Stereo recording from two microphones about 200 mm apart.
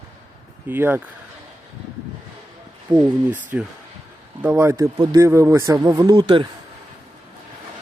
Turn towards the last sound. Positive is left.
turn(degrees=-20)  # may be behind; listen again after turning